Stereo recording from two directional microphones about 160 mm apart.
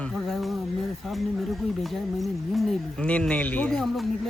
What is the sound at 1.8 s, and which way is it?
Speech, centre (ahead or behind).